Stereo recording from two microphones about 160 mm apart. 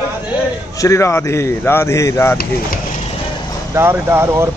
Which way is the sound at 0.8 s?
20° left (ahead or behind).